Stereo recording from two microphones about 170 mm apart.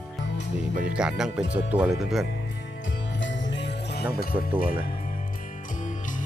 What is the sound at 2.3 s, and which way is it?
Music, 85° left.